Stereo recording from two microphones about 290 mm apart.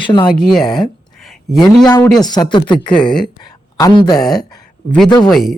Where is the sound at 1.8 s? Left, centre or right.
Centre.